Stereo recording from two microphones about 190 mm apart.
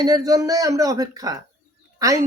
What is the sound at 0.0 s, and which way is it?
Speech, 20° right (ahead or behind).